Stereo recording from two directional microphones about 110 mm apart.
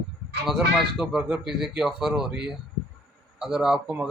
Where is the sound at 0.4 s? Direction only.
5° right (ahead or behind).